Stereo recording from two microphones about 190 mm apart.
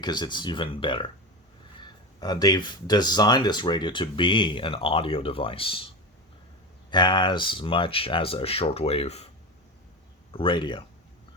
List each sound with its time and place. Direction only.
0.0 s speech: 20° left (ahead or behind)
6.9 s speech: 25° left (ahead or behind)
10.3 s speech: 25° left (ahead or behind)